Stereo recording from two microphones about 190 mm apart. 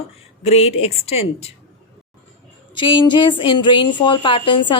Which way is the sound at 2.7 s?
25° left (ahead or behind).